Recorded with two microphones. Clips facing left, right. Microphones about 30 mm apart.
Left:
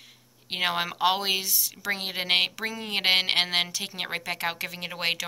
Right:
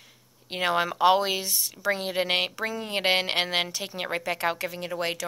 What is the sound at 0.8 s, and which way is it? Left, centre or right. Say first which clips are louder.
Speech: right 3 dB; centre.